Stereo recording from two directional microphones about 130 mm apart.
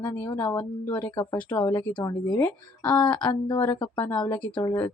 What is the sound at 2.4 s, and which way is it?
Speech, 10° left (ahead or behind).